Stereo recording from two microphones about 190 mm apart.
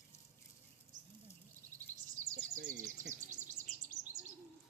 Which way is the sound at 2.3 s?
40° right (ahead or behind).